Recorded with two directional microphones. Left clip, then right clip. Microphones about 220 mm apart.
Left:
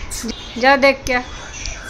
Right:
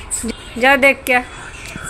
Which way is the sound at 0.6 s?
Centre (ahead or behind).